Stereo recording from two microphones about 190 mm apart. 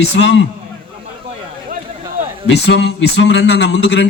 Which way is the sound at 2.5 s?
65° left (ahead or behind).